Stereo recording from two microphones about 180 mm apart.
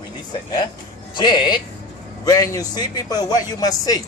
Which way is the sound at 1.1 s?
25° left (ahead or behind).